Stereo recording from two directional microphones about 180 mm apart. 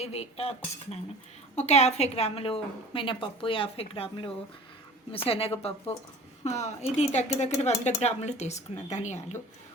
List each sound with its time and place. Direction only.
0.0 s speech: 35° left (ahead or behind)